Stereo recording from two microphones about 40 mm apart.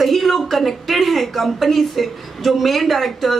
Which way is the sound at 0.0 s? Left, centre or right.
Centre.